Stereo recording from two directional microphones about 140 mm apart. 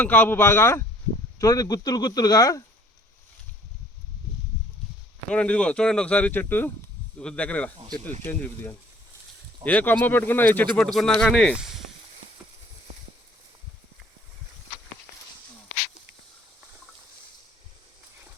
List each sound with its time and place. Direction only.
0.0 s speech: 10° left (ahead or behind)
5.3 s speech: 10° left (ahead or behind)